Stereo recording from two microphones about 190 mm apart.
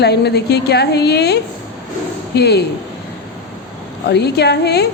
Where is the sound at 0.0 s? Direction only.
60° left (ahead or behind).